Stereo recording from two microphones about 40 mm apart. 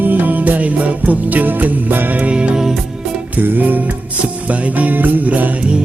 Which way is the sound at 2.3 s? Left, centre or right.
Right.